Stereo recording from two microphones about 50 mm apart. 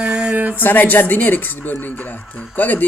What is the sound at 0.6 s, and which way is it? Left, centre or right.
Speech, left.